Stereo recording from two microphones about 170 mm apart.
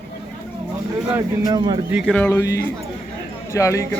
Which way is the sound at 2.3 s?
20° left (ahead or behind).